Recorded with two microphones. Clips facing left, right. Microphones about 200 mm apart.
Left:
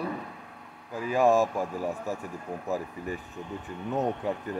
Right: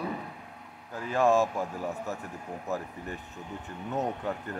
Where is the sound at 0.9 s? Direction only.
10° left (ahead or behind).